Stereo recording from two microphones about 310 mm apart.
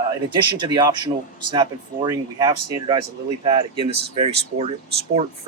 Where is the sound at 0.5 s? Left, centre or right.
Centre.